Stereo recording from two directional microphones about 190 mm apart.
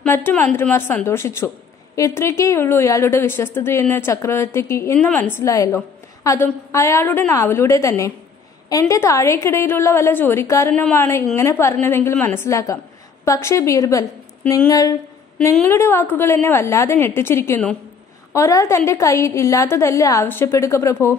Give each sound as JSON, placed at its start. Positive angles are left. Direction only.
{"t": 0.0, "sound": "a woman's voice", "side_deg": 10}